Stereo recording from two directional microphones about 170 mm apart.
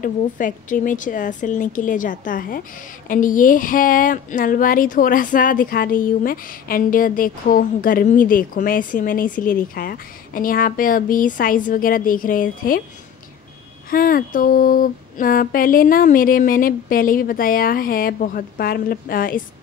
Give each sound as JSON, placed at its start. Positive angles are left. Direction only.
{"t": 0.0, "sound": "a woman's voice", "side_deg": 50}
{"t": 13.8, "sound": "speech", "side_deg": 55}